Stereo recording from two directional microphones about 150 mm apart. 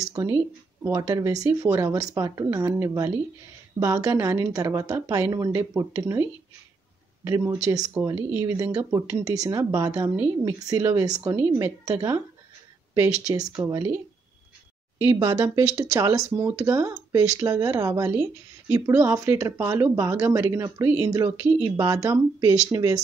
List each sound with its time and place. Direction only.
0.0 s a sound: 20° right (ahead or behind)
0.8 s speech: 15° right (ahead or behind)
7.2 s speech: 20° right (ahead or behind)
15.0 s speech: 20° right (ahead or behind)